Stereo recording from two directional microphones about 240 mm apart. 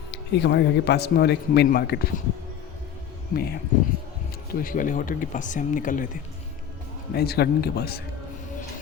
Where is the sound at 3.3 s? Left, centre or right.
Left.